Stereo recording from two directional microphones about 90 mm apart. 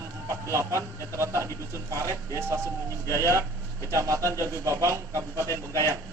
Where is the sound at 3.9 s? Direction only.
35° right (ahead or behind).